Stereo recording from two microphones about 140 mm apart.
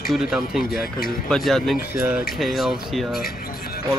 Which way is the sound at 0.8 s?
90° left.